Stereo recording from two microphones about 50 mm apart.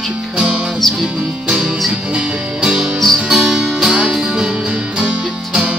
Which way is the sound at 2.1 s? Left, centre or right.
Centre.